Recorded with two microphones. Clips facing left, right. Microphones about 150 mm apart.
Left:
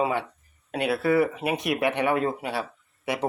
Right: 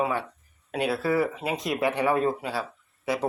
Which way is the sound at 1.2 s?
20° left (ahead or behind).